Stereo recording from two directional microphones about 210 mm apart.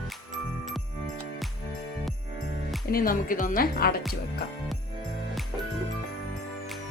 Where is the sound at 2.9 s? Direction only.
45° left (ahead or behind).